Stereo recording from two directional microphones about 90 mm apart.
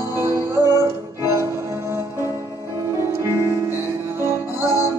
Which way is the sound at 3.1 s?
35° right (ahead or behind).